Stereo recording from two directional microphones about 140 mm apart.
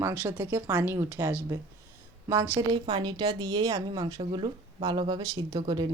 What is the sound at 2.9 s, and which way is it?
Speech, 35° right (ahead or behind).